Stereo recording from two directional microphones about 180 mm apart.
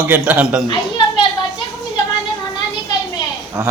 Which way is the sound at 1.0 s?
30° left (ahead or behind).